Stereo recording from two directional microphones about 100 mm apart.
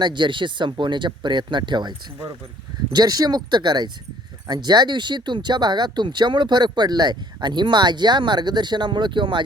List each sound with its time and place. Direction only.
0.0 s speech: 50° right (ahead or behind)